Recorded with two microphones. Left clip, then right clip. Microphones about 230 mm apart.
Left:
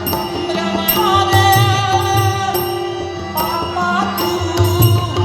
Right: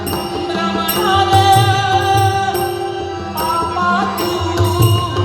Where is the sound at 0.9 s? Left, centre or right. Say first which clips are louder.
Right 1 dB; left.